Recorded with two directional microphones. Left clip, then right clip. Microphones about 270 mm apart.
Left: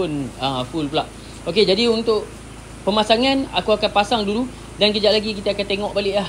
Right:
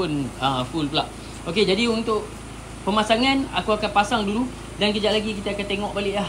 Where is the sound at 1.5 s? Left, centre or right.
Centre.